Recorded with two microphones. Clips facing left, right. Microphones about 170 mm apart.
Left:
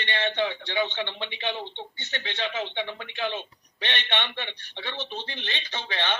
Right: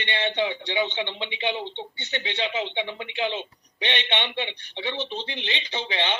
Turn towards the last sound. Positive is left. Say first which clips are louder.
# right 3 dB
turn(degrees=-15)  # may be behind; listen again after turning